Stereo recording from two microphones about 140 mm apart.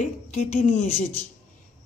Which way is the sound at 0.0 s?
60° left (ahead or behind).